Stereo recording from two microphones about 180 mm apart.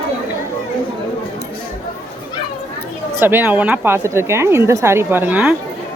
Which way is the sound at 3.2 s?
10° right (ahead or behind).